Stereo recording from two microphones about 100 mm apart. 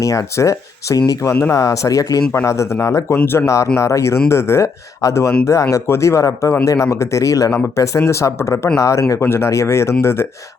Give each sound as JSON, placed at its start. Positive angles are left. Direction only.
{"t": 0.0, "sound": "speech", "side_deg": 35}
{"t": 1.3, "sound": "speech", "side_deg": 25}